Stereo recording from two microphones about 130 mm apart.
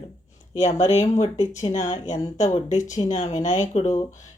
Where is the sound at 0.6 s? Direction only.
55° left (ahead or behind).